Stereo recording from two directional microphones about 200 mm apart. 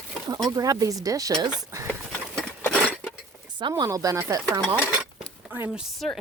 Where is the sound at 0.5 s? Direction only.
15° right (ahead or behind).